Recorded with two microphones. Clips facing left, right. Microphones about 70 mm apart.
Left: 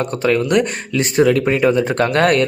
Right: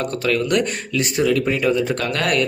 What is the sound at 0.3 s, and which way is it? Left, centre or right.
Speech, left.